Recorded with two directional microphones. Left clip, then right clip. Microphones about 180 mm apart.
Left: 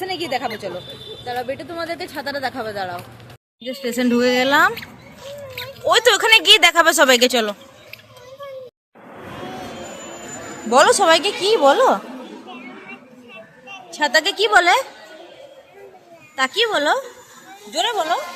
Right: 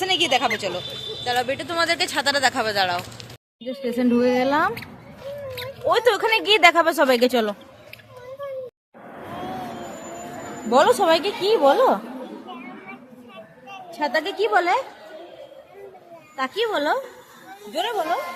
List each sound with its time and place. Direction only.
0.0 s speech: 10° right (ahead or behind)
5.8 s speech: 5° right (ahead or behind)
7.3 s a sound: 10° right (ahead or behind)
10.7 s speech: centre (ahead or behind)
12.5 s a sound: 10° right (ahead or behind)
13.9 s speech: centre (ahead or behind)
16.3 s speech: centre (ahead or behind)